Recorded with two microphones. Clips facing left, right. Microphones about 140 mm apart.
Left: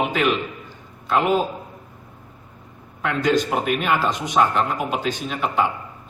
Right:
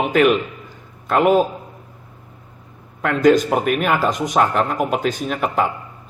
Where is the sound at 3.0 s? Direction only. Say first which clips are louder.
Right 6 dB; 50° right (ahead or behind).